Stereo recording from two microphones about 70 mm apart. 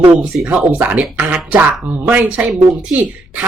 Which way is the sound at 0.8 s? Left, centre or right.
Right.